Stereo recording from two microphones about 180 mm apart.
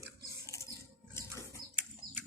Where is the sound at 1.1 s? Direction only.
15° left (ahead or behind).